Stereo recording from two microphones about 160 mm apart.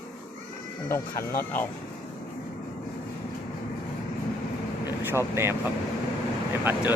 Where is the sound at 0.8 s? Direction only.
15° left (ahead or behind).